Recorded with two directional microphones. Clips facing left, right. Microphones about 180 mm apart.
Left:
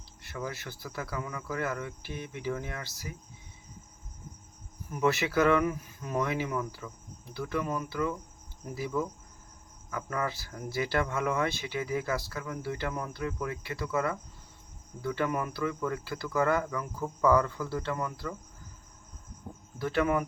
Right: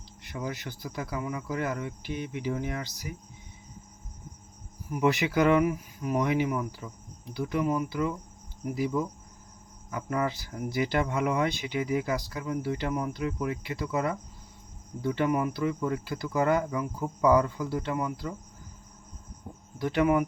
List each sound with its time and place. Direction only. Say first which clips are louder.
0.2 s speech: right 2 dB; 20° right (ahead or behind)
4.9 s speech: right 2 dB; 15° right (ahead or behind)
19.8 s speech: right 3 dB; 15° right (ahead or behind)